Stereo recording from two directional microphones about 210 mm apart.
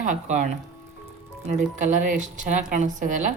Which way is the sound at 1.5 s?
35° right (ahead or behind).